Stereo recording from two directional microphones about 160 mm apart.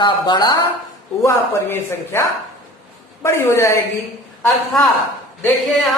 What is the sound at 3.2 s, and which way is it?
Speech, 15° left (ahead or behind).